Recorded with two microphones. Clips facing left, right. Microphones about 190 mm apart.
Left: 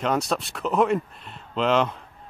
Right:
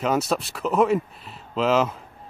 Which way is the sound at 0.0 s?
5° right (ahead or behind).